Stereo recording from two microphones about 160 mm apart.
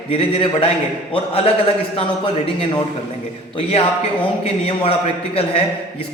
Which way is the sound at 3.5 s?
35° left (ahead or behind).